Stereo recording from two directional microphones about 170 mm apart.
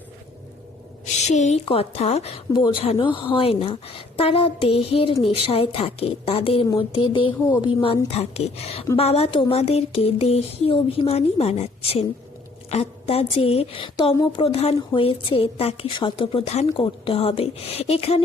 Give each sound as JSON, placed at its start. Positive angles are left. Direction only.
{"t": 1.0, "sound": "a woman's voice", "side_deg": 45}